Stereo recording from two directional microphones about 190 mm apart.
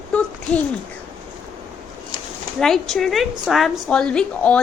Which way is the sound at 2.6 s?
Centre (ahead or behind).